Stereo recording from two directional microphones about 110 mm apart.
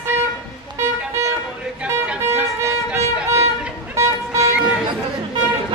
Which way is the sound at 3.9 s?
25° right (ahead or behind).